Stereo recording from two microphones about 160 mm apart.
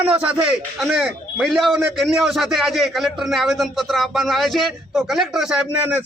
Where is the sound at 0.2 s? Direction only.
10° right (ahead or behind).